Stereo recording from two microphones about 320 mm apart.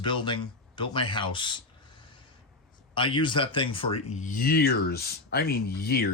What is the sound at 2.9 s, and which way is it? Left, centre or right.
Speech, centre.